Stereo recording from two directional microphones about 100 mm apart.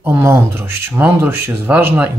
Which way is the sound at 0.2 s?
25° right (ahead or behind).